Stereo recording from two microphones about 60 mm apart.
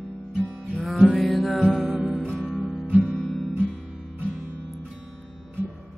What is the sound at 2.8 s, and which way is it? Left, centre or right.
Music, right.